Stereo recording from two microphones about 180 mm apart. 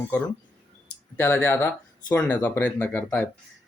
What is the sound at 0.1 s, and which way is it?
Speech, 10° left (ahead or behind).